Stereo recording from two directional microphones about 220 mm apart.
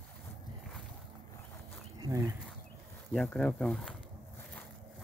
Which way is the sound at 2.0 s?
15° right (ahead or behind).